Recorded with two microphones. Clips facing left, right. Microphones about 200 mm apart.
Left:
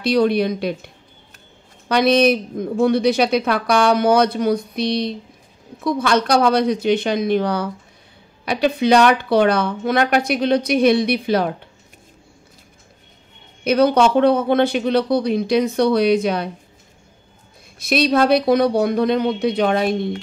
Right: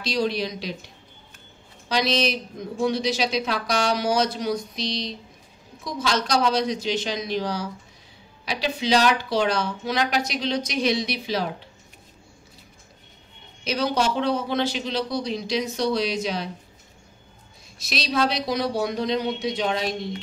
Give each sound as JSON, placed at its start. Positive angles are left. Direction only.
{"t": 0.0, "sound": "speech", "side_deg": 55}
{"t": 13.7, "sound": "speech", "side_deg": 55}
{"t": 17.7, "sound": "speech", "side_deg": 55}